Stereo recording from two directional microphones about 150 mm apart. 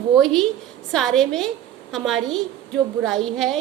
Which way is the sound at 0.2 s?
5° left (ahead or behind).